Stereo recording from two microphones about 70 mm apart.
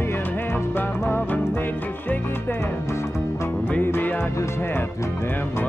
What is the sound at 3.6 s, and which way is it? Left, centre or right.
Music, left.